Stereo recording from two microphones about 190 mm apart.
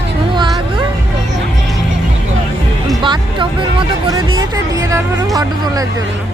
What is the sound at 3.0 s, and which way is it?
Music, 25° right (ahead or behind).